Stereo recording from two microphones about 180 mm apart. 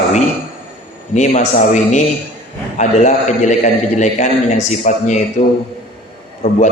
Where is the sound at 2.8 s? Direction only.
40° left (ahead or behind).